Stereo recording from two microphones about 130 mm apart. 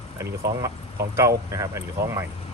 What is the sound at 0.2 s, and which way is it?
Speech, 25° right (ahead or behind).